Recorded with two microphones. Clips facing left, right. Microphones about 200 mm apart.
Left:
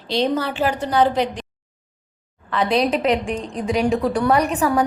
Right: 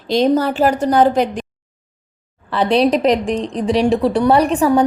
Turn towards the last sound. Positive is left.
turn(degrees=-30)  # may be behind; listen again after turning